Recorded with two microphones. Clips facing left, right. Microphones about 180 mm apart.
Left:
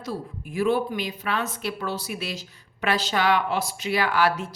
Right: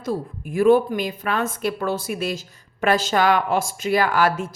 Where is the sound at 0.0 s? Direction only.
50° right (ahead or behind).